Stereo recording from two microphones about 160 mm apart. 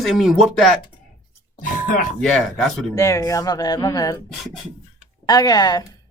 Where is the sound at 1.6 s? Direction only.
55° left (ahead or behind).